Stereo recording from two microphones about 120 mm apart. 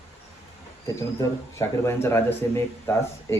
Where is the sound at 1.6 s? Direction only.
25° left (ahead or behind).